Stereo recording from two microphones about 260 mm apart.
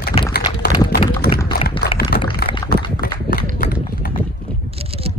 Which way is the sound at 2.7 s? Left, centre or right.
Left.